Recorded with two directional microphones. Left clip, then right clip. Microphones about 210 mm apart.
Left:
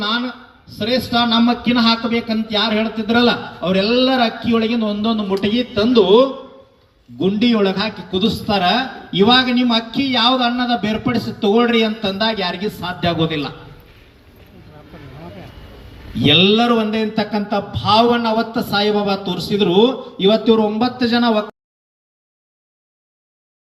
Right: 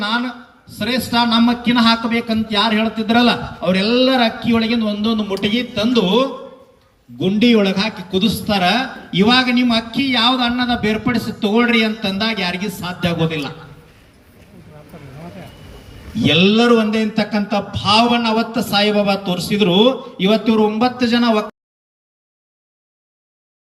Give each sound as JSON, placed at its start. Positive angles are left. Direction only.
{"t": 0.0, "sound": "a sound", "side_deg": 45}
{"t": 0.8, "sound": "a man's voice", "side_deg": 45}
{"t": 16.2, "sound": "speech", "side_deg": 10}